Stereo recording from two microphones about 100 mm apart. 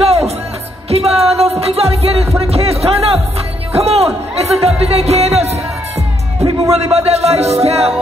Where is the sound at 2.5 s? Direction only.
85° right.